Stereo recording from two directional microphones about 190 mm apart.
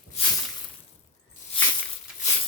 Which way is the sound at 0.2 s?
35° left (ahead or behind).